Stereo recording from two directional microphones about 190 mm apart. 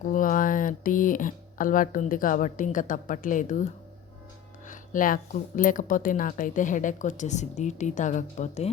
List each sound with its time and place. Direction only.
0.0 s speech: 45° left (ahead or behind)